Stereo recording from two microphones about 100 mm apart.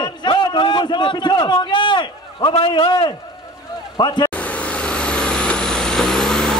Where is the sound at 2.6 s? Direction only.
60° left (ahead or behind).